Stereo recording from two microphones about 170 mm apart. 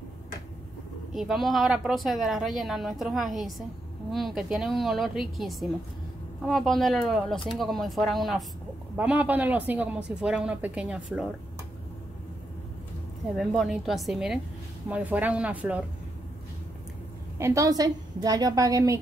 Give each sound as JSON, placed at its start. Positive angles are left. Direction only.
{"t": 1.1, "sound": "a woman's voice", "side_deg": 0}
{"t": 13.4, "sound": "a woman's voice", "side_deg": 0}
{"t": 17.4, "sound": "a woman's voice", "side_deg": -15}